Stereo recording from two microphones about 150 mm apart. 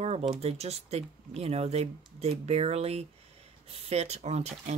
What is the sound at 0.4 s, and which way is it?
Speech, 45° right (ahead or behind).